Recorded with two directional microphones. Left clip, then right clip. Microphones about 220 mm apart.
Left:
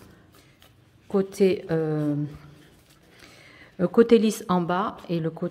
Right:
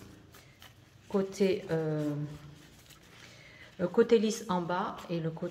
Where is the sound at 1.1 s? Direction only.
50° left (ahead or behind).